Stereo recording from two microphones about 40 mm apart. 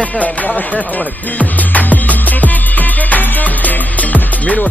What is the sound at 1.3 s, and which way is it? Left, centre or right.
Music, left.